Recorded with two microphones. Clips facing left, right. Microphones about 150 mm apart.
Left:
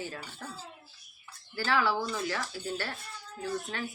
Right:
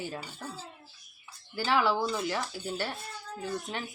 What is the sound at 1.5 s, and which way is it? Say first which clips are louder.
Speech: right 2 dB; 15° right (ahead or behind).